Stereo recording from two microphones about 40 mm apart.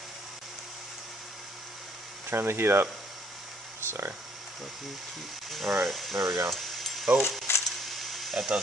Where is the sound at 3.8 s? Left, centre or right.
Right.